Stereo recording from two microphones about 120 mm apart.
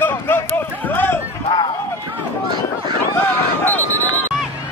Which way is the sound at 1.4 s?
45° left (ahead or behind).